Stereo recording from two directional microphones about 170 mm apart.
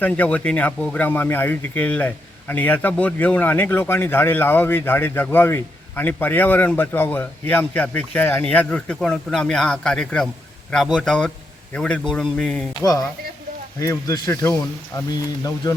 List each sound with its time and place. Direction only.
0.0 s speech: 10° left (ahead or behind)
12.8 s speech: 20° left (ahead or behind)